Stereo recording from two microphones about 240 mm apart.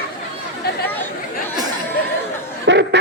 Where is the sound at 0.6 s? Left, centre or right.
Left.